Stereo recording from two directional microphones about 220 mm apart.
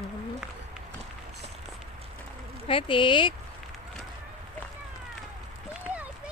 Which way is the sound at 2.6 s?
25° left (ahead or behind).